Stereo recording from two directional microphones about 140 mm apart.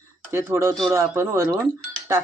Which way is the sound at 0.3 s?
20° right (ahead or behind).